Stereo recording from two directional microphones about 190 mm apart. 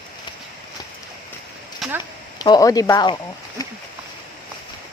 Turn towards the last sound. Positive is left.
turn(degrees=20)  # may be behind; listen again after turning